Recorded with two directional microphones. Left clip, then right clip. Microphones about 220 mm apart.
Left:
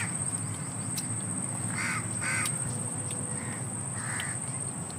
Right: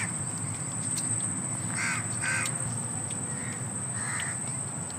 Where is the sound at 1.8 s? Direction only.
35° right (ahead or behind).